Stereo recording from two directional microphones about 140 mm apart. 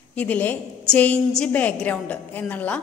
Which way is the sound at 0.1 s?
10° left (ahead or behind).